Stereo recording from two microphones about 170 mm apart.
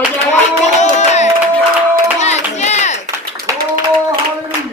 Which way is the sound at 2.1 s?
40° left (ahead or behind).